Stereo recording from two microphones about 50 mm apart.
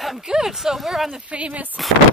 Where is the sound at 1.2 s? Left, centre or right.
Right.